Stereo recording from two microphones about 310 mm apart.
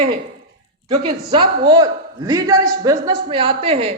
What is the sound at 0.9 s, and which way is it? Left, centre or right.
A man's voice, centre.